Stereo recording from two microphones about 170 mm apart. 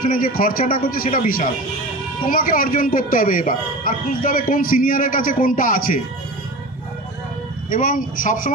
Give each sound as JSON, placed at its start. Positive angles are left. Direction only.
{"t": 0.0, "sound": "speech", "side_deg": 55}
{"t": 7.7, "sound": "a man's voice", "side_deg": 55}